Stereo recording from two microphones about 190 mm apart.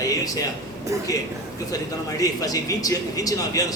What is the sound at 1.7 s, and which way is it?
A man's voice, 20° left (ahead or behind).